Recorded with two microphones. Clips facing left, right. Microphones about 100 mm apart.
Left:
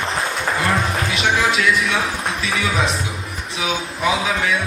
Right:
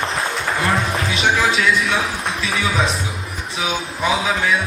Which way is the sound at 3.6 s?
30° right (ahead or behind).